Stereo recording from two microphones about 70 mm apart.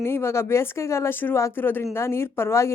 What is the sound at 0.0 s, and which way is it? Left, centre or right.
Speech, left.